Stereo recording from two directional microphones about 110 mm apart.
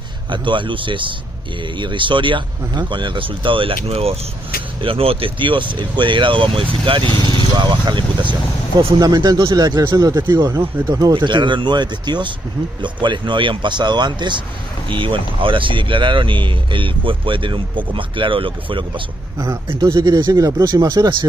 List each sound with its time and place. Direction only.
0.3 s speech: 50° right (ahead or behind)
19.8 s speech: 40° right (ahead or behind)